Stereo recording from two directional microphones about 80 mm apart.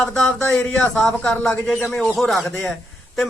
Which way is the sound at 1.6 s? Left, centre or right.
Centre.